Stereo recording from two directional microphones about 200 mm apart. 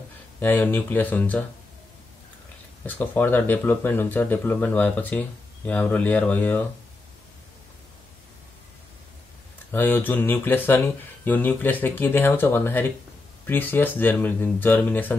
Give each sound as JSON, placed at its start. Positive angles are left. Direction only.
{"t": 0.4, "sound": "speech", "side_deg": 10}
{"t": 3.0, "sound": "speech", "side_deg": 10}
{"t": 9.7, "sound": "speech", "side_deg": 10}